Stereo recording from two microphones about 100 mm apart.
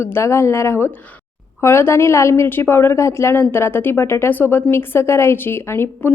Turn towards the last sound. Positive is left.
turn(degrees=25)  # may be behind; listen again after turning